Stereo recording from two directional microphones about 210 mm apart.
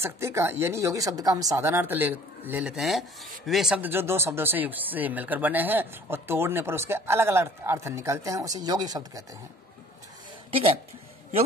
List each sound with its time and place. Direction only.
0.0 s speech: 10° right (ahead or behind)